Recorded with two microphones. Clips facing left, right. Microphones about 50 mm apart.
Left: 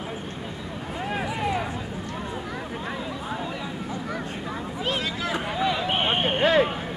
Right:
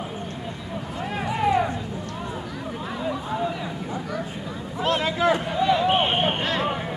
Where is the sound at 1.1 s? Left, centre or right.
Centre.